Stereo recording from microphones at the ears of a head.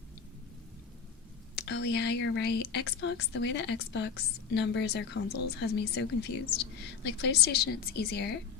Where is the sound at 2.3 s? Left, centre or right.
Left.